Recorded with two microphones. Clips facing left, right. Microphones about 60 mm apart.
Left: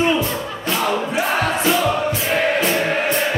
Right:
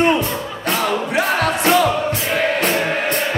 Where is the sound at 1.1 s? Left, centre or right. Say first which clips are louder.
Right 2 dB; right.